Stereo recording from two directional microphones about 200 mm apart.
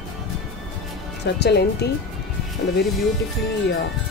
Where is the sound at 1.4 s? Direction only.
55° left (ahead or behind).